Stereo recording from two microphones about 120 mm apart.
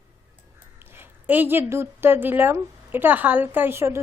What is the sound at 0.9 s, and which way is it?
A woman's voice, 15° right (ahead or behind).